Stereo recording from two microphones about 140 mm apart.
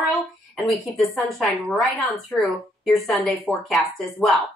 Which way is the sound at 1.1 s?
Centre (ahead or behind).